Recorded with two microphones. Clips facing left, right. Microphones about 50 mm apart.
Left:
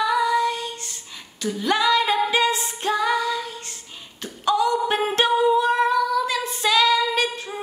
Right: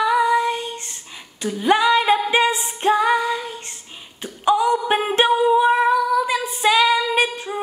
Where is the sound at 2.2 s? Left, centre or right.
Right.